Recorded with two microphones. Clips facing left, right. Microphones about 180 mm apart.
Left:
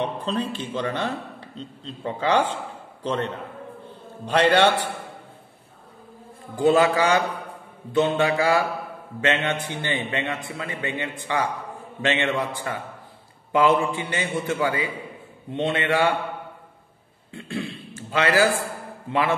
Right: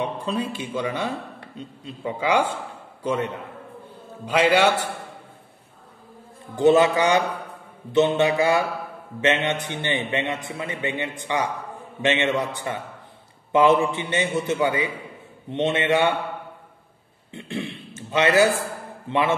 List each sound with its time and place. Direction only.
0.0 s a man's voice: 10° right (ahead or behind)
6.5 s a man's voice: 20° right (ahead or behind)
17.3 s throat clearing: 20° right (ahead or behind)